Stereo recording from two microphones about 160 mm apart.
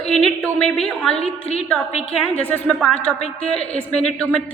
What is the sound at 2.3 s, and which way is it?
A woman's voice, 10° left (ahead or behind).